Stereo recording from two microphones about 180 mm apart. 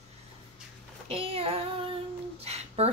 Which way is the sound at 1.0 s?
30° right (ahead or behind).